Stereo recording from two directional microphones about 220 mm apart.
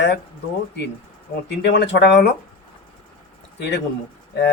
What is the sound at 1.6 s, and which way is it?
Speech, 50° left (ahead or behind).